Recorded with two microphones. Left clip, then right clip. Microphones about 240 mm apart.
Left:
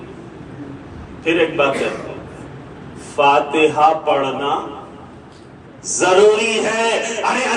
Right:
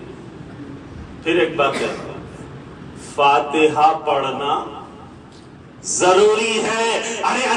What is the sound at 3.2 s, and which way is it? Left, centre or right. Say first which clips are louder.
Speech: left 1 dB; right.